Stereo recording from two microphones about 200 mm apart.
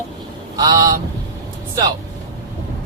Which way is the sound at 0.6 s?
20° right (ahead or behind).